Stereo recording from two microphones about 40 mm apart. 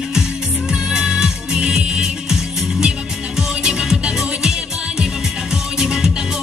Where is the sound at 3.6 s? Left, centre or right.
Centre.